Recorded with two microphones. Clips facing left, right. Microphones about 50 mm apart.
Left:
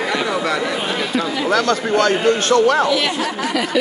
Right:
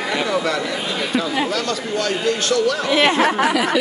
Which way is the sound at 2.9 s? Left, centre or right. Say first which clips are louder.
Right 3 dB; right.